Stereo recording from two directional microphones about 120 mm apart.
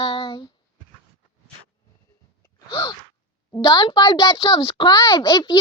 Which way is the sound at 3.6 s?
40° left (ahead or behind).